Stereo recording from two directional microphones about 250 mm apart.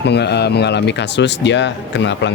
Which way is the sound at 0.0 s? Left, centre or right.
Left.